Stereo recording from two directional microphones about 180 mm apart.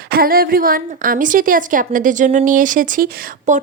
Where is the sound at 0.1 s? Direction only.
55° right (ahead or behind).